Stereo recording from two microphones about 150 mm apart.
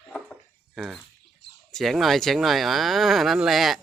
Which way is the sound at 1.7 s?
Centre (ahead or behind).